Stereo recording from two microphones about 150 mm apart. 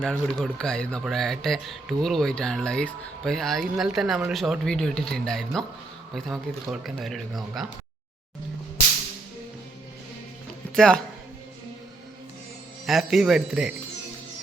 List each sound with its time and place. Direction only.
0.0 s speech: 5° left (ahead or behind)
10.8 s speech: 5° left (ahead or behind)
12.8 s speech: centre (ahead or behind)